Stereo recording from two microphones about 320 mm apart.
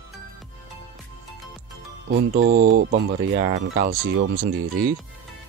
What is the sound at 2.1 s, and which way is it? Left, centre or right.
Speech, right.